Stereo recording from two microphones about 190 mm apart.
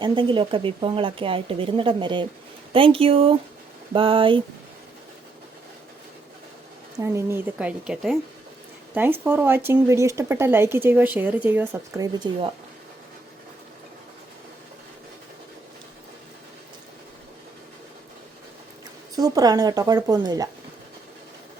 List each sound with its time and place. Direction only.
0.0 s speech: 25° right (ahead or behind)
7.0 s speech: 15° right (ahead or behind)
19.1 s speech: 20° right (ahead or behind)